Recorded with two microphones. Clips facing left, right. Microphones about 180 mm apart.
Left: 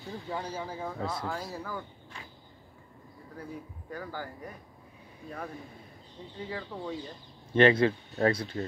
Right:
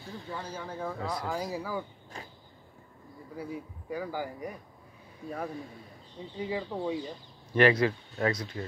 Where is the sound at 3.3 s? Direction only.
10° right (ahead or behind).